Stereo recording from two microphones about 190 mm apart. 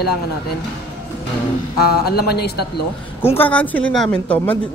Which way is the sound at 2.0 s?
55° left (ahead or behind).